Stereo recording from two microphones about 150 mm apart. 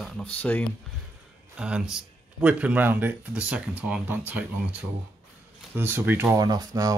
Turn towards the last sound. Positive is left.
turn(degrees=-25)  # may be behind; listen again after turning